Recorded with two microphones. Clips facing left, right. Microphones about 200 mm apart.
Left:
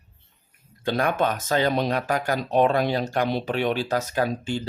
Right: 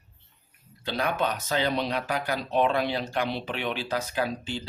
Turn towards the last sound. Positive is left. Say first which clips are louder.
# left 5 dB
turn(degrees=50)  # may be behind; listen again after turning